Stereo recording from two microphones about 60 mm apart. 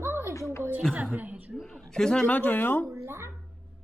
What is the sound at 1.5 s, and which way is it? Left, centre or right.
Speech, centre.